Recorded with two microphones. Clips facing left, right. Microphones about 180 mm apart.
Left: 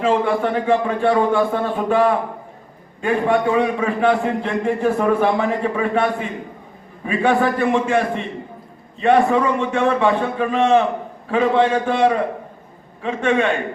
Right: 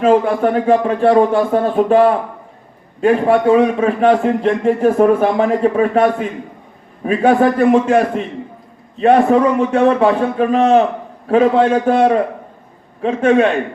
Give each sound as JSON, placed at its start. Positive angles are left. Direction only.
{"t": 0.0, "sound": "a man's voice", "side_deg": -50}
{"t": 0.7, "sound": "a man's voice", "side_deg": -35}